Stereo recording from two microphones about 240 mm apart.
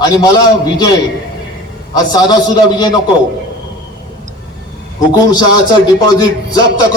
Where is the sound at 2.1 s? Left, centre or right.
Centre.